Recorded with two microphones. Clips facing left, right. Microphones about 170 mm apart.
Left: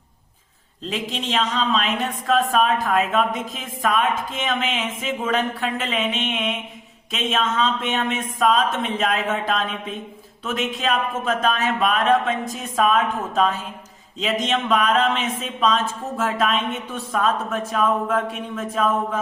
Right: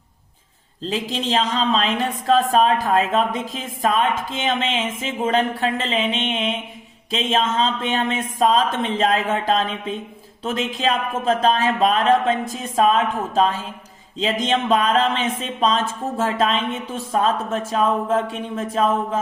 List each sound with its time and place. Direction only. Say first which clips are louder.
0.8 s speech: right 3 dB; 35° right (ahead or behind)